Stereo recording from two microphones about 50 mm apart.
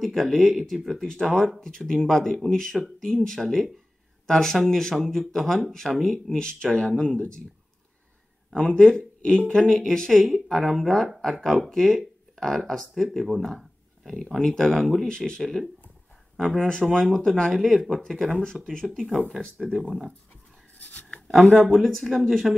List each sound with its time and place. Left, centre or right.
0.0 s speech: centre
1.6 s speech: centre
8.6 s speech: centre
17.8 s speech: centre
18.1 s speech: centre
18.9 s speech: centre
20.9 s speech: left
21.7 s speech: centre